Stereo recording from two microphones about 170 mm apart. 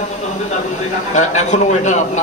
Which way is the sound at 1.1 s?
45° left (ahead or behind).